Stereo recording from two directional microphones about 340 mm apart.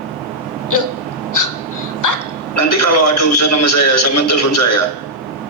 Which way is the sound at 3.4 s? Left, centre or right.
Left.